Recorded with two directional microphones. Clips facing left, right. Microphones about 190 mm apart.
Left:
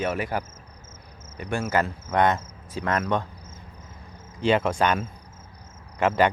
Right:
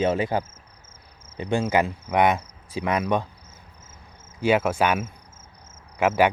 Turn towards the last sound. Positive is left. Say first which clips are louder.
# right 1 dB
turn(degrees=-10)  # may be behind; listen again after turning